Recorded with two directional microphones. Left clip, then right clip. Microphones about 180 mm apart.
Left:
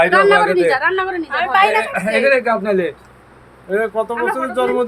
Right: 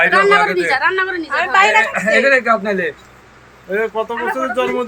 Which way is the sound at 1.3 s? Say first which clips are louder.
Right 1 dB; 30° right (ahead or behind).